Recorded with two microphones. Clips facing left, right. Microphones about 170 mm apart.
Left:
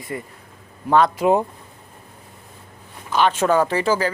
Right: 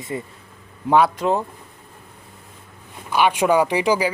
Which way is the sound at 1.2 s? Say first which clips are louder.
Left 4 dB; 15° left (ahead or behind).